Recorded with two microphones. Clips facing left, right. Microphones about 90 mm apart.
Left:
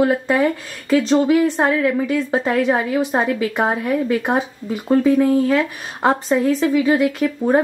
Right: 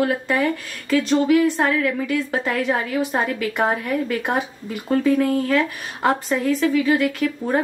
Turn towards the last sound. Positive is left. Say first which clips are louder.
# left 5 dB
turn(degrees=20)  # may be behind; listen again after turning